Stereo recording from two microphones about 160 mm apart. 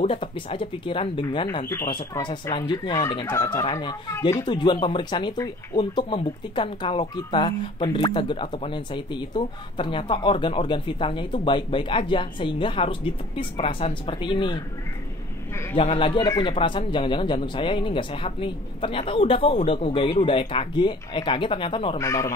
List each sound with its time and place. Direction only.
0.0 s speech: 35° left (ahead or behind)
15.7 s speech: 35° left (ahead or behind)
16.2 s speech: 20° left (ahead or behind)
16.4 s speech: 30° left (ahead or behind)
21.9 s speech: 20° left (ahead or behind)